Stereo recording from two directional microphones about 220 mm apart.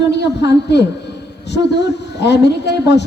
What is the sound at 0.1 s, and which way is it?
A woman's voice, 50° left (ahead or behind).